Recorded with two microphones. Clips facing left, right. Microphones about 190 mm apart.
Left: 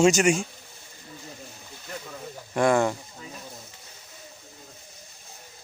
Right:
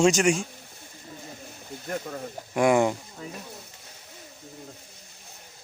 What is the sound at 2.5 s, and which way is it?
Speech, 15° right (ahead or behind).